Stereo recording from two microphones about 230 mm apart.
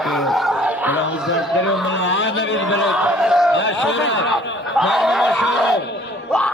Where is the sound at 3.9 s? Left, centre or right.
Left.